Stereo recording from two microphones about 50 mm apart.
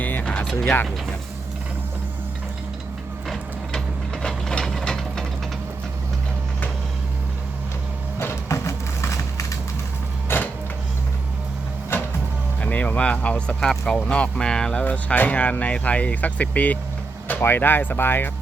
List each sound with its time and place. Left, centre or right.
0.0 s mechanisms: left
0.6 s speech: left
3.7 s ratchet: centre
8.4 s a sound: left
10.2 s music: left
12.6 s speech: left
13.6 s speech: centre
14.8 s speech: left
17.4 s speech: left